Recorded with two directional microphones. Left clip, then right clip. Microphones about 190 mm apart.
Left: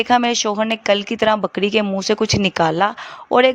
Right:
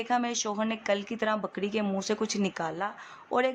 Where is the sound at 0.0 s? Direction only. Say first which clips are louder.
Left 13 dB; 45° left (ahead or behind).